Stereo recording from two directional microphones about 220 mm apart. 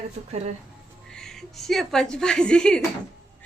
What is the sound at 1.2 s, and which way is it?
A woman's voice, centre (ahead or behind).